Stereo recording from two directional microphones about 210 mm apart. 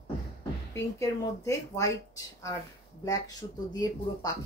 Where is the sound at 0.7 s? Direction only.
15° left (ahead or behind).